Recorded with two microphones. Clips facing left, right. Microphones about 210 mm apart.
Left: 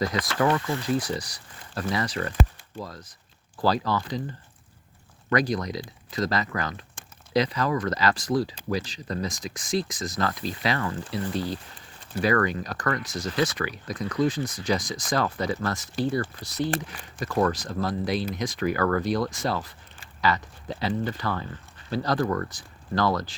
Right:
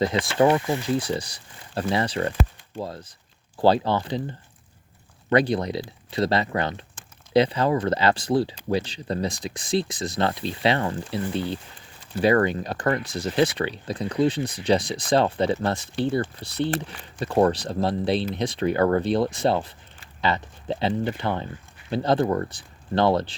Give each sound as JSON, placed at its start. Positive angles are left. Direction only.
{"t": 0.0, "sound": "speech", "side_deg": -25}